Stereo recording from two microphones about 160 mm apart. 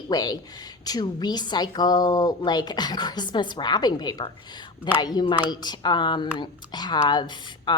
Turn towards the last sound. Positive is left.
turn(degrees=30)  # may be behind; listen again after turning